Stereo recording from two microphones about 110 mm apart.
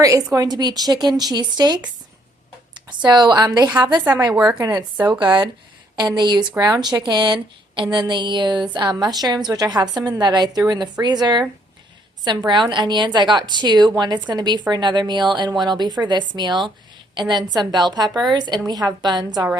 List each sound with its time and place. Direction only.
0.0 s a woman's voice: 30° right (ahead or behind)
4.4 s speech: 5° right (ahead or behind)
5.2 s a woman's voice: 45° right (ahead or behind)
12.5 s a woman's voice: 40° right (ahead or behind)